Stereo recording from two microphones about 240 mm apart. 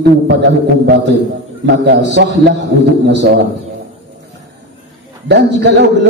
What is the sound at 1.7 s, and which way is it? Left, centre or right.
A man's voice, right.